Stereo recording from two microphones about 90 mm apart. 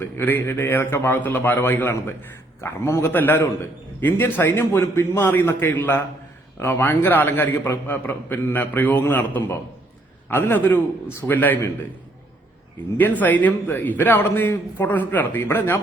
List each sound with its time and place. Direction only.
0.0 s a man's voice: 25° left (ahead or behind)
3.2 s a man's voice: 20° left (ahead or behind)
13.0 s a man's voice: 20° left (ahead or behind)